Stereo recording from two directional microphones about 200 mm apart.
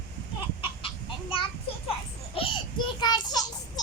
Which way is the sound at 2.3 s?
25° left (ahead or behind).